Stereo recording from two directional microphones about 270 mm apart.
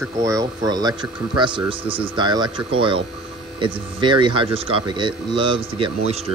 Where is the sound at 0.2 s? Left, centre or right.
Centre.